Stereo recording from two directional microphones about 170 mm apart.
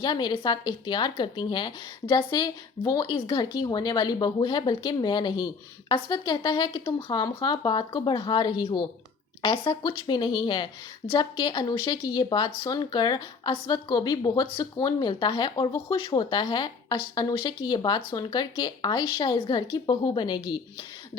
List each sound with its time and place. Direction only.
0.0 s a woman's voice: 25° left (ahead or behind)